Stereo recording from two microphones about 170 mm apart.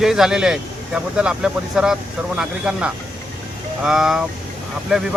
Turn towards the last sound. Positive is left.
turn(degrees=-5)  # may be behind; listen again after turning